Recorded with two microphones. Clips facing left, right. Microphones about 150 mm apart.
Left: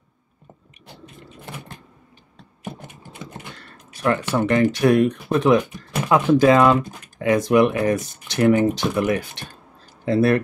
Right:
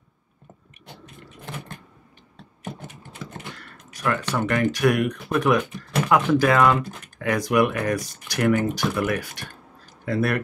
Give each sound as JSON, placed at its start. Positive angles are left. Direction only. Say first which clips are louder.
{"t": 3.9, "sound": "speech", "louder": "left 4 dB", "side_deg": 25}